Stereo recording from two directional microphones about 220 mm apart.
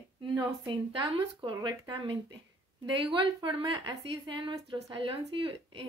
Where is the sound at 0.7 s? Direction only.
20° right (ahead or behind).